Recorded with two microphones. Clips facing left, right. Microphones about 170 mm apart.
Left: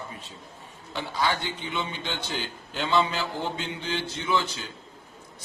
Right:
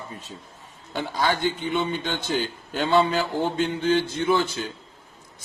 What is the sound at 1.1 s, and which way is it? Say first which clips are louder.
A man's voice: right 4 dB; 45° right (ahead or behind).